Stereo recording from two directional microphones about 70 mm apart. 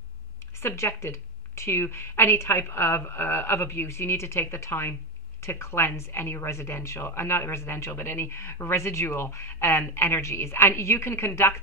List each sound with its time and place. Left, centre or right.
0.6 s speech: left